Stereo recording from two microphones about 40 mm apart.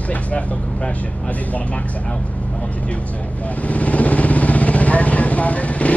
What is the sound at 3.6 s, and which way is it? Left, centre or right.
Vehicle, left.